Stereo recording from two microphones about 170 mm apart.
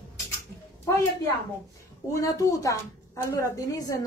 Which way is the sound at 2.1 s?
20° left (ahead or behind).